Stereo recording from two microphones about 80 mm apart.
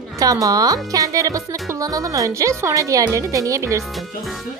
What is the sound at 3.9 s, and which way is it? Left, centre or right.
Speech, centre.